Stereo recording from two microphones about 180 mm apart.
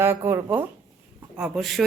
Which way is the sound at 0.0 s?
15° right (ahead or behind).